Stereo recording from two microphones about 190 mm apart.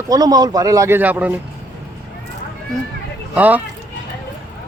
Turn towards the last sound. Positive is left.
turn(degrees=-10)  # may be behind; listen again after turning